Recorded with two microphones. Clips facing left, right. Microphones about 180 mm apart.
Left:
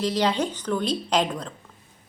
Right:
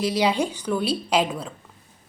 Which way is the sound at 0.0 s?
10° right (ahead or behind).